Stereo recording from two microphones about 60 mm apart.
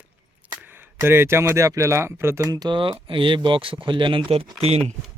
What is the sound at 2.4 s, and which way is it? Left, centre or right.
Speech, right.